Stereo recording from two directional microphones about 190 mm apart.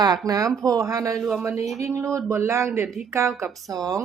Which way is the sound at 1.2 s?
Centre (ahead or behind).